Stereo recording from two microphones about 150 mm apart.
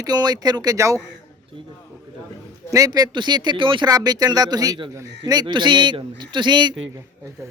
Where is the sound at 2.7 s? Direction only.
25° right (ahead or behind).